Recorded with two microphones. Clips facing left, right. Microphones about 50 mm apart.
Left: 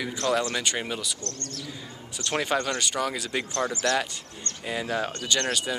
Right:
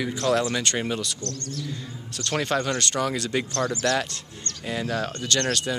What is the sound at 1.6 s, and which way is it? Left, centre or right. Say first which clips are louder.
Speech: right 4 dB; centre.